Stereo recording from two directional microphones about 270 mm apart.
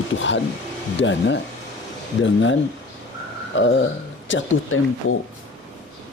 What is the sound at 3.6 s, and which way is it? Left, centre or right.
Speech, left.